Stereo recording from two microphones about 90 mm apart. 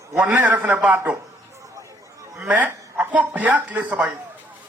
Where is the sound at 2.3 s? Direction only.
15° right (ahead or behind).